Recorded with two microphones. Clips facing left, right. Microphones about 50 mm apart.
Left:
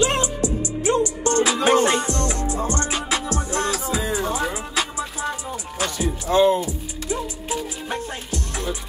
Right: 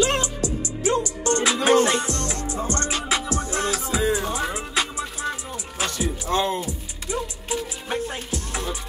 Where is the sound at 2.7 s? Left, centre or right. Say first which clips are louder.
Left 1 dB; centre.